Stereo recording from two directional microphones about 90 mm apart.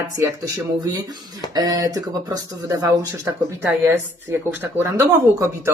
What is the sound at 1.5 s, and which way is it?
Speech, 45° right (ahead or behind).